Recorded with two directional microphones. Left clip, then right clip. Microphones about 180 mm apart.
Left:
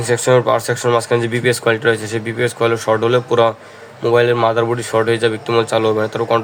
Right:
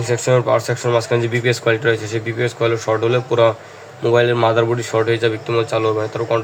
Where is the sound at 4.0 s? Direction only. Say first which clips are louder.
Left 1 dB; 10° left (ahead or behind); by 6.4 s 25° left (ahead or behind).